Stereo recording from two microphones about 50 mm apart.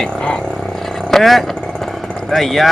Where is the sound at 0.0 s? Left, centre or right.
Centre.